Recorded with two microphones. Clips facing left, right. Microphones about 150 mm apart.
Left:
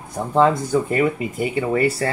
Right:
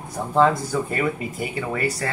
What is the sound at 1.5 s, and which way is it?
Speech, 30° left (ahead or behind).